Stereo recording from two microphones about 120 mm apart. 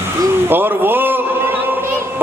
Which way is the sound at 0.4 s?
15° right (ahead or behind).